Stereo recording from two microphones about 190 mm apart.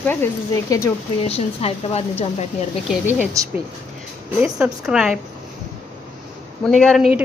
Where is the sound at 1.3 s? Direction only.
35° left (ahead or behind).